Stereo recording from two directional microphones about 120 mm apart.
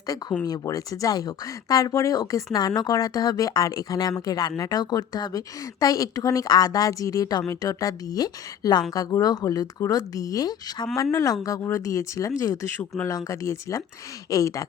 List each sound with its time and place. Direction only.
0.4 s speech: 30° left (ahead or behind)